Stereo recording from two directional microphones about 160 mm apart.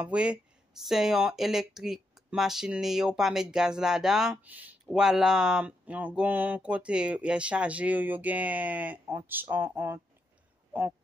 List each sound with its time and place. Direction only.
0.0 s speech: 5° right (ahead or behind)